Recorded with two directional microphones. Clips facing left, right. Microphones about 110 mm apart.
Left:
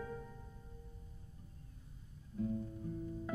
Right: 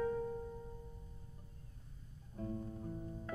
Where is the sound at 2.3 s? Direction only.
50° right (ahead or behind).